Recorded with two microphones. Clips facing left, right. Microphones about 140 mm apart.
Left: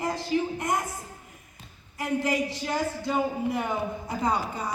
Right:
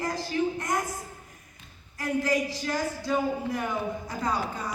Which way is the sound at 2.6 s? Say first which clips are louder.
Left 1 dB; 25° left (ahead or behind).